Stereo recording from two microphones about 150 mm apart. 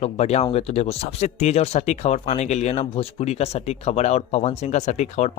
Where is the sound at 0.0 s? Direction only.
45° left (ahead or behind).